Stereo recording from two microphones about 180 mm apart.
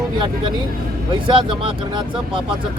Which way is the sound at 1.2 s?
25° right (ahead or behind).